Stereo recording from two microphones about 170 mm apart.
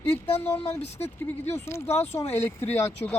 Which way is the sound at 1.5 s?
15° left (ahead or behind).